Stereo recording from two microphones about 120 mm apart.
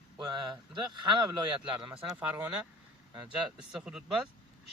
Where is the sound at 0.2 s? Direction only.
35° right (ahead or behind).